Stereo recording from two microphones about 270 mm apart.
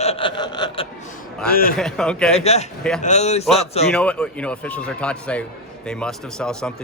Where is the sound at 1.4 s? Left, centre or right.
Left.